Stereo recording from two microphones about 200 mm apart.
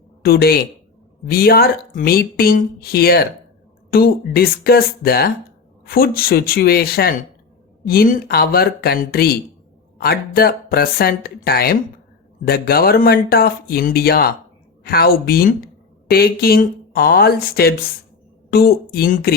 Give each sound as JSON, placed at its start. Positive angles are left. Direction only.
{"t": 0.2, "sound": "speech", "side_deg": 50}